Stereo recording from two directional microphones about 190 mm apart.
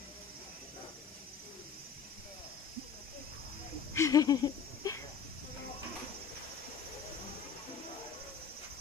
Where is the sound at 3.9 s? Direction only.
15° left (ahead or behind).